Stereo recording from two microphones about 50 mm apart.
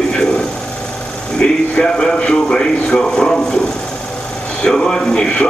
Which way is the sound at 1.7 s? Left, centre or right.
Centre.